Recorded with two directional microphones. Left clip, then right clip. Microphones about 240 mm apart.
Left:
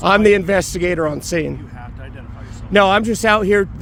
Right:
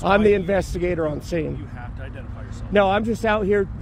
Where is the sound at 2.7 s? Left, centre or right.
Left.